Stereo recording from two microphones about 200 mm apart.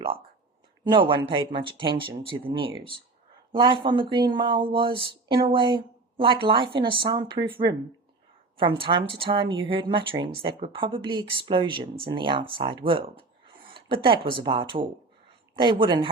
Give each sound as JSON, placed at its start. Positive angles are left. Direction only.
{"t": 0.9, "sound": "speech", "side_deg": -25}